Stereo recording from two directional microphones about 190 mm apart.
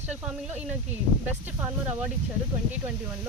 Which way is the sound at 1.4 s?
10° right (ahead or behind).